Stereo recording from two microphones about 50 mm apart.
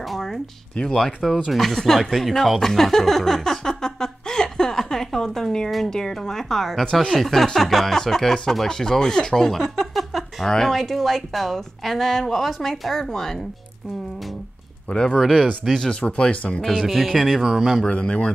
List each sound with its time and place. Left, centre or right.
0.0 s a sound: centre
0.7 s a woman's voice: centre
14.9 s a woman's voice: centre
15.1 s a woman's voice: centre
16.1 s speech: centre
16.8 s a woman's voice: centre
17.4 s a woman's voice: centre
17.8 s speech: left